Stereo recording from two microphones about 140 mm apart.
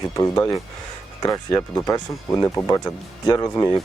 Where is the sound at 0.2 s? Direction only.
25° left (ahead or behind).